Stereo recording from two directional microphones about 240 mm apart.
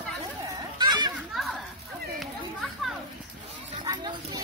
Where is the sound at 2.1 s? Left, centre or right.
Centre.